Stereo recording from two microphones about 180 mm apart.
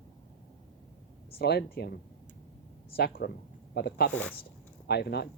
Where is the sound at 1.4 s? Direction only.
65° left (ahead or behind).